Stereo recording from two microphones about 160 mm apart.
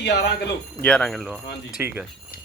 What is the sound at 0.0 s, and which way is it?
Speech, 90° left.